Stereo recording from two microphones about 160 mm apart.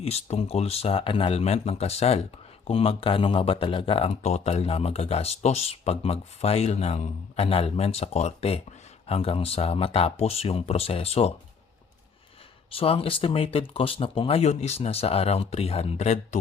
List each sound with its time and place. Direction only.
0.0 s speech: 40° left (ahead or behind)
12.7 s speech: 35° left (ahead or behind)